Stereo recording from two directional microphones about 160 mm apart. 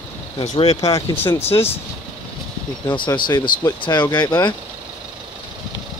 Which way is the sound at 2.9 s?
30° left (ahead or behind).